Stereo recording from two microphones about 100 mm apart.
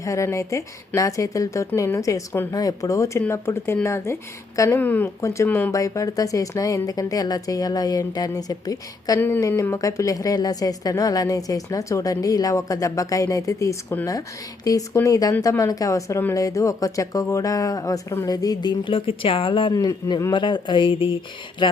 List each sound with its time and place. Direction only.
0.0 s a woman's voice: 30° left (ahead or behind)
4.8 s speech: 15° left (ahead or behind)
5.2 s speech: 30° left (ahead or behind)
5.5 s speech: 20° left (ahead or behind)
5.7 s a woman's voice: 35° left (ahead or behind)
9.4 s a woman's voice: 25° left (ahead or behind)
18.3 s speech: 45° left (ahead or behind); by 19.7 s 60° left (ahead or behind)
19.7 s a woman's voice: 40° left (ahead or behind)
20.3 s speech: 55° left (ahead or behind)